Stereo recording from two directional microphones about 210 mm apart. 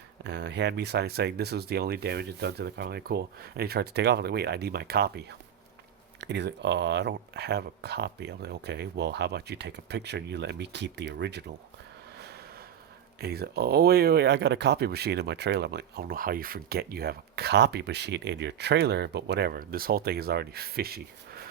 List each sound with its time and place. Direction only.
0.3 s speech: 55° right (ahead or behind)
13.1 s speech: 50° right (ahead or behind)